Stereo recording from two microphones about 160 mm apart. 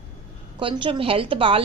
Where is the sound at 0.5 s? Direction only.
30° right (ahead or behind).